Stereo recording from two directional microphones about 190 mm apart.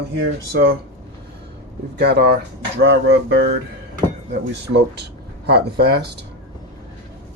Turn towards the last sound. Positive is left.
turn(degrees=-60)  # may be behind; listen again after turning